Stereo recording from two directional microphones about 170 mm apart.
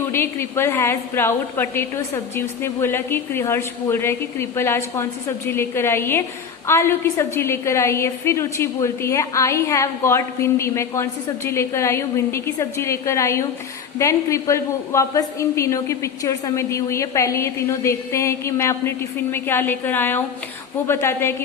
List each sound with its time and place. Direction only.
0.1 s a woman's voice: 15° left (ahead or behind)